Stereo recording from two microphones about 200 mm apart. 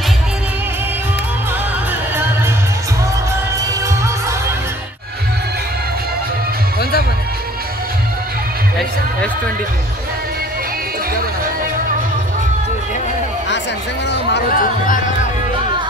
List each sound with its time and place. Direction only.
3.8 s music: 15° right (ahead or behind)
6.8 s music: 50° left (ahead or behind)
14.1 s a sound: 50° left (ahead or behind)